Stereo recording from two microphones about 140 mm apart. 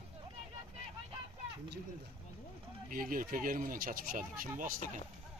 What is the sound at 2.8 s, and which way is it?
Speech, 80° right.